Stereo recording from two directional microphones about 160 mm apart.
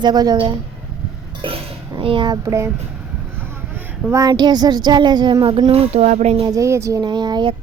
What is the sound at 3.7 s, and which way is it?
Speech, 15° right (ahead or behind).